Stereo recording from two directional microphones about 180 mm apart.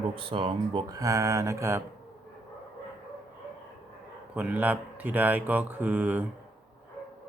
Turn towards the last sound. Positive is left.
turn(degrees=-10)  # may be behind; listen again after turning